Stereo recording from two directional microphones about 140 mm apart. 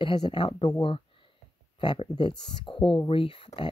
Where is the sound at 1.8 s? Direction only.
35° left (ahead or behind).